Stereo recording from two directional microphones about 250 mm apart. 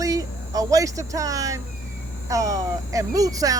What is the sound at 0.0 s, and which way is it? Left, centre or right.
Speech, centre.